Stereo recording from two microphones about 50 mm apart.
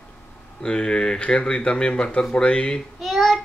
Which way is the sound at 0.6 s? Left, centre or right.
Centre.